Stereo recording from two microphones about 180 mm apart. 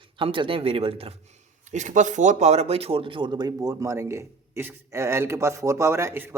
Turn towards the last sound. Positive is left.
turn(degrees=-10)  # may be behind; listen again after turning